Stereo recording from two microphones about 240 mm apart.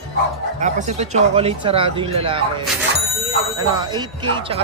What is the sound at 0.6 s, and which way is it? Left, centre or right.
Speech, right.